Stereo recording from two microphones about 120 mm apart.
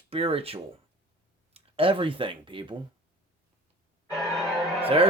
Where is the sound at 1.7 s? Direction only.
50° right (ahead or behind).